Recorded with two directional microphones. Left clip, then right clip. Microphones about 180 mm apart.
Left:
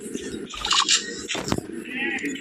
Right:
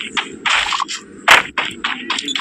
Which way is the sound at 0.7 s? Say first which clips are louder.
Even; 65° right (ahead or behind).